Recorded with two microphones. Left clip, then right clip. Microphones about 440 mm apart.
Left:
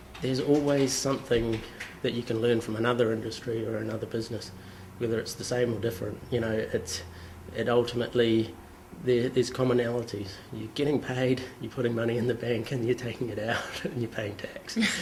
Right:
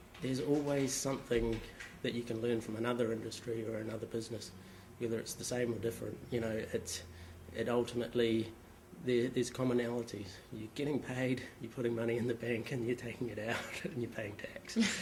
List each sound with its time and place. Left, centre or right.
0.2 s speech: centre